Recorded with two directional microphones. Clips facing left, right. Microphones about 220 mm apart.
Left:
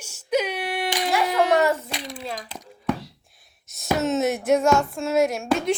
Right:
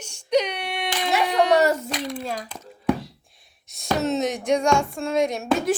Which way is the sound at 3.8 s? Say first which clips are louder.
Left 1 dB; centre (ahead or behind).